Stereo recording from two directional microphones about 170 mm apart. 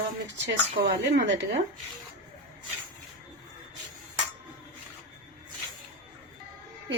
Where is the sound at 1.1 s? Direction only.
80° right.